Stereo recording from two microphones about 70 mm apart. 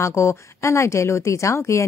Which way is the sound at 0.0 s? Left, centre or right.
Left.